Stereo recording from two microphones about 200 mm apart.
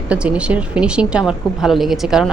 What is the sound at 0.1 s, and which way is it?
A woman's voice, 5° right (ahead or behind).